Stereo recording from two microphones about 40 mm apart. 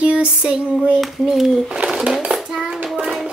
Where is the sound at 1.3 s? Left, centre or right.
Centre.